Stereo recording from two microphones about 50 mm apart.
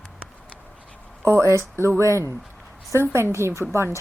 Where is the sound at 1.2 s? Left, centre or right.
Right.